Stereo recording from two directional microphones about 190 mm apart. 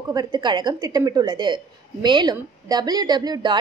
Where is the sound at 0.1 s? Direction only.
20° right (ahead or behind).